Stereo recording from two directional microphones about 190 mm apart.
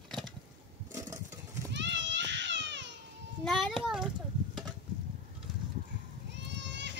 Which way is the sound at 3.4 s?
Centre (ahead or behind).